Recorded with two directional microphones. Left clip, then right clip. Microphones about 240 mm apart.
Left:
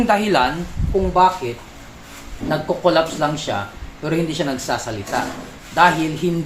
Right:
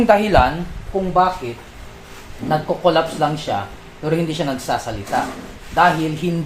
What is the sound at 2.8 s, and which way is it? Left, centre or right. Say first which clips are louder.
Speech: even; centre.